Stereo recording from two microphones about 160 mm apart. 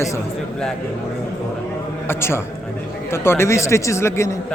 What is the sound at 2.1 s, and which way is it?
A man's voice, 15° left (ahead or behind).